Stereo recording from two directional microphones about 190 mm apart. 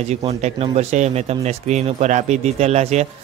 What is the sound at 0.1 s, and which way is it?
Speech, 35° right (ahead or behind).